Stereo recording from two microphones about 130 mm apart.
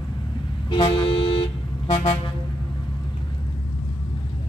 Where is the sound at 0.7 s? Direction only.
40° left (ahead or behind).